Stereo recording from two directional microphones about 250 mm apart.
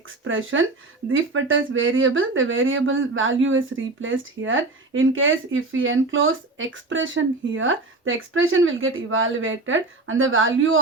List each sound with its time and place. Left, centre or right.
0.3 s speech: right